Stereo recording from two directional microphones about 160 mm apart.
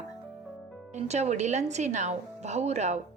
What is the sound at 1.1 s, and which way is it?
A woman's voice, 45° right (ahead or behind).